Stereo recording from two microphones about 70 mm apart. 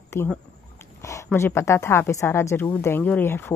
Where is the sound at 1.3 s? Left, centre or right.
Left.